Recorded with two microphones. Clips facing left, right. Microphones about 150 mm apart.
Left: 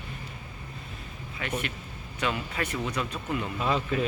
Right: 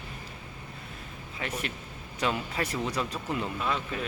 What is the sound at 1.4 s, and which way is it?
Speech, 30° right (ahead or behind).